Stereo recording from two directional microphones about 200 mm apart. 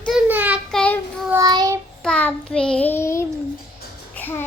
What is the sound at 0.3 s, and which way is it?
Child singing, 10° right (ahead or behind).